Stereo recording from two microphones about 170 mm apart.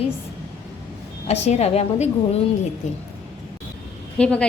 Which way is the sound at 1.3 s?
40° left (ahead or behind).